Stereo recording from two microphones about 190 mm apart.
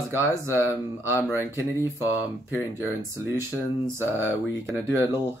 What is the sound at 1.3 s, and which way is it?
Speech, 10° right (ahead or behind).